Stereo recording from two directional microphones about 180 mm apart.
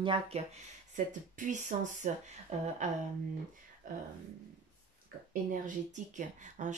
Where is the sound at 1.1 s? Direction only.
45° right (ahead or behind).